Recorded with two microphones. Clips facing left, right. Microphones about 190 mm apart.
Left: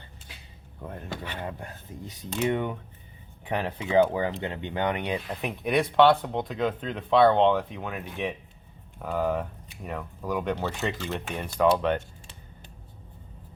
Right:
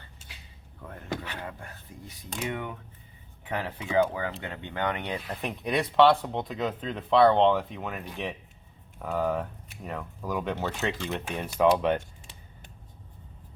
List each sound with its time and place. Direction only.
0.8 s speech: 20° left (ahead or behind)
5.2 s speech: centre (ahead or behind)